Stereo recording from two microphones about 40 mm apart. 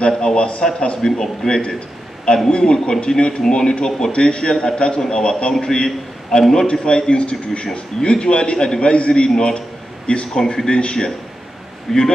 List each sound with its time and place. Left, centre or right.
0.1 s a man's voice: left
10.3 s speech: centre
11.9 s speech: centre